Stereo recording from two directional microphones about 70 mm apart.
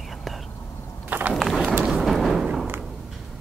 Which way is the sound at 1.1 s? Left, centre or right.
Right.